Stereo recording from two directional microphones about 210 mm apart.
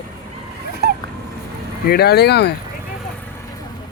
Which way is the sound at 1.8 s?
50° left (ahead or behind).